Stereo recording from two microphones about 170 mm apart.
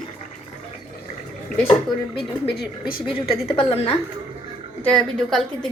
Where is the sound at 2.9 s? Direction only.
60° left (ahead or behind).